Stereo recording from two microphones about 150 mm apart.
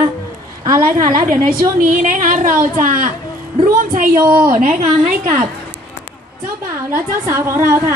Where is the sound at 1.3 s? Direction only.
60° right (ahead or behind).